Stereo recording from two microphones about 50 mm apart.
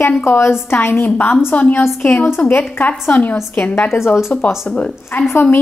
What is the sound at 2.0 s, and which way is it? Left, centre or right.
Speech, left.